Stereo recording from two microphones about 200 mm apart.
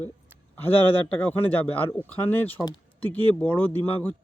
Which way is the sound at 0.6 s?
10° left (ahead or behind).